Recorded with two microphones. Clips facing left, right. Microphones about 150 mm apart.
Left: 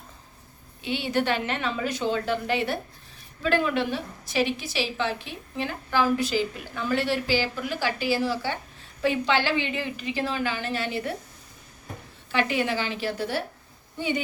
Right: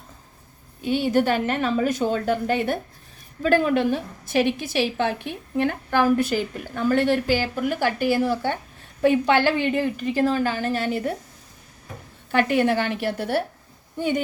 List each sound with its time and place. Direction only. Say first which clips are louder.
0.8 s a woman's voice: right 6 dB; 45° right (ahead or behind)
12.3 s a woman's voice: right 6 dB; 50° right (ahead or behind)